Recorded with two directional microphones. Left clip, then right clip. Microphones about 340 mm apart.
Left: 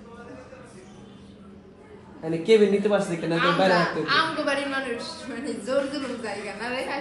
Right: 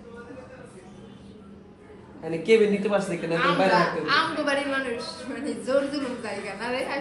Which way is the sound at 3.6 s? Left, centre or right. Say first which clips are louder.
Even; centre.